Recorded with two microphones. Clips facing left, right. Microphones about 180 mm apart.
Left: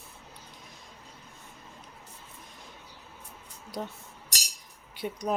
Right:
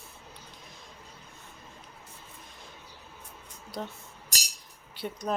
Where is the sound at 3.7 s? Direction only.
15° left (ahead or behind).